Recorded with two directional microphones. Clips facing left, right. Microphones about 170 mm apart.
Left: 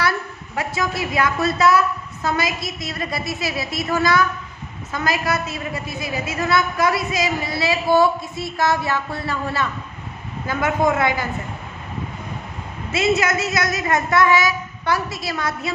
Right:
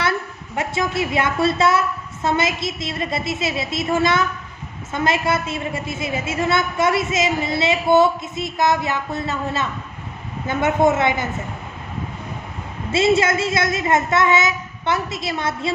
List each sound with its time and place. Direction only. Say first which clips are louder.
0.5 s a woman's voice: right 2 dB; 25° right (ahead or behind)
12.9 s a woman's voice: right 3 dB; 30° right (ahead or behind)